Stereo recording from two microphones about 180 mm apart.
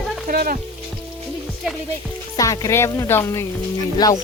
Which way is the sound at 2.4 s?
20° left (ahead or behind).